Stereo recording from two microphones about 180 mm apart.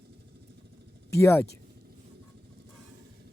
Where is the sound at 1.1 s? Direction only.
15° left (ahead or behind).